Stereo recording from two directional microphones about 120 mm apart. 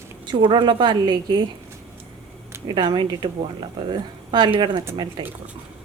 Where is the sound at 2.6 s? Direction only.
40° right (ahead or behind).